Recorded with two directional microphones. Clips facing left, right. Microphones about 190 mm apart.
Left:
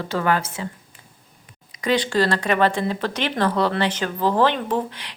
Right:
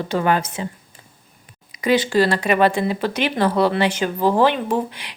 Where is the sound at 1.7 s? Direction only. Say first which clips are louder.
Right 3 dB; 10° right (ahead or behind).